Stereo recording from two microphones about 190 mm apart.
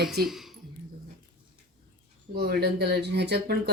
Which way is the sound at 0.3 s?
Centre (ahead or behind).